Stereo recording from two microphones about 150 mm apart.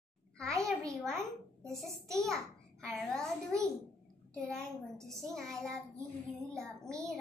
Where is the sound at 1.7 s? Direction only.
Centre (ahead or behind).